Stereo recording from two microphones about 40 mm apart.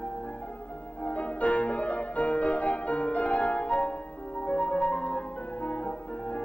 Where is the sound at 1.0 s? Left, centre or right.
Left.